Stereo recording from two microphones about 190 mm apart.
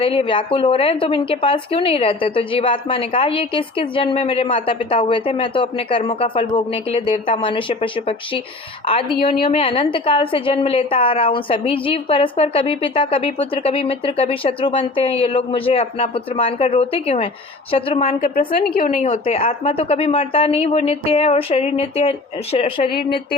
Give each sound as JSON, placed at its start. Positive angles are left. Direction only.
{"t": 0.0, "sound": "a woman's voice", "side_deg": 30}